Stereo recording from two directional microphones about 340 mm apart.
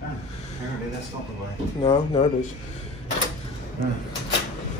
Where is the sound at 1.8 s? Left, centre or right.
Centre.